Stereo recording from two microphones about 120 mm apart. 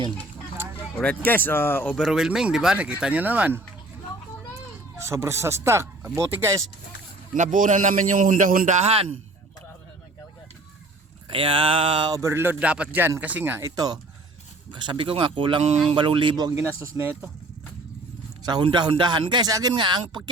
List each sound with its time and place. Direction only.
0.9 s speech: 10° left (ahead or behind)
2.0 s speech: 5° right (ahead or behind)
4.9 s speech: 25° right (ahead or behind)
7.3 s a man's voice: 90° right; by 9.1 s 60° right (ahead or behind)
11.3 s speech: 45° right (ahead or behind)
12.1 s speech: 25° right (ahead or behind)
13.7 s a man's voice: 35° right (ahead or behind)
16.5 s speech: 20° right (ahead or behind)
18.4 s a man's voice: 40° right (ahead or behind)